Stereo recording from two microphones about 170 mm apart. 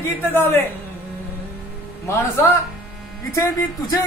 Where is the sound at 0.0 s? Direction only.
15° left (ahead or behind).